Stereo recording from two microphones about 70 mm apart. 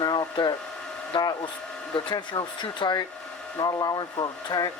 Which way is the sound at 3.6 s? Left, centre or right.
Left.